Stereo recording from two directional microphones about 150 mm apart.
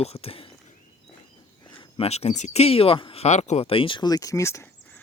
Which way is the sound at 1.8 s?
40° left (ahead or behind).